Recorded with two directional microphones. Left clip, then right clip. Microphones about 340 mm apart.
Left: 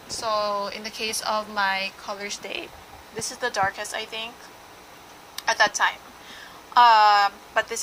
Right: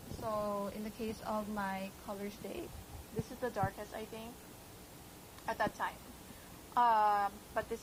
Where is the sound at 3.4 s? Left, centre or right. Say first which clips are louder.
Left 13 dB; centre.